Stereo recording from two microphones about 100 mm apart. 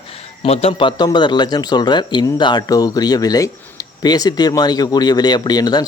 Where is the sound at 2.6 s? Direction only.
35° left (ahead or behind).